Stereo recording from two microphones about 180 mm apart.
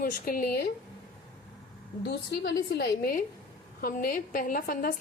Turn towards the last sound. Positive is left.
turn(degrees=50)  # may be behind; listen again after turning